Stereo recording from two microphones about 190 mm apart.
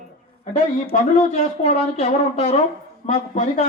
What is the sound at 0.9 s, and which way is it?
A man's voice, 35° left (ahead or behind).